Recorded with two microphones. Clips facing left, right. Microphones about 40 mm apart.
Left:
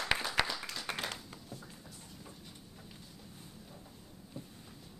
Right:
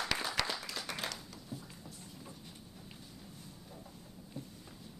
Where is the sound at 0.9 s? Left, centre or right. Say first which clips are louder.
Left 5 dB; left.